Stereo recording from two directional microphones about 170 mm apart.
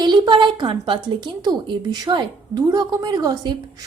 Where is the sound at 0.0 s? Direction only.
25° right (ahead or behind).